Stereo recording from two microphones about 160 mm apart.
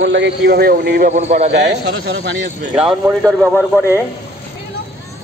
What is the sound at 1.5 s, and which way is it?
Speech, 90° right.